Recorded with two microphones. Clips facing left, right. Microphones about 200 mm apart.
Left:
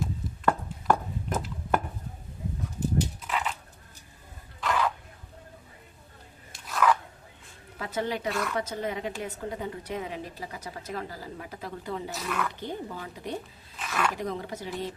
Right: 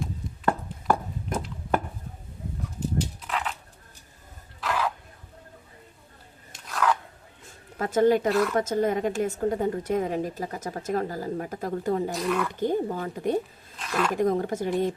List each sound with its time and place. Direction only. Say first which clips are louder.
0.0 s a sound: even; 5° right (ahead or behind)
3.2 s a sound: even; centre (ahead or behind)
4.6 s cough: even; 5° right (ahead or behind)
6.7 s biting: left 1 dB; centre (ahead or behind)
7.8 s a woman's voice: right 10 dB; 45° right (ahead or behind)
8.3 s speech: right 7 dB; centre (ahead or behind)
8.5 s a woman's voice: right 7 dB; 45° right (ahead or behind)
12.1 s speech: right 6 dB; centre (ahead or behind)
12.5 s a woman's voice: right 10 dB; 45° right (ahead or behind)
13.7 s speech: right 3 dB; 5° left (ahead or behind)
14.2 s a woman's voice: right 9 dB; 50° right (ahead or behind)